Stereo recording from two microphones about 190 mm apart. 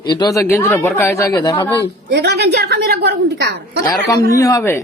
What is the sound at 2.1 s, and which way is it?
A woman's voice, 60° right (ahead or behind).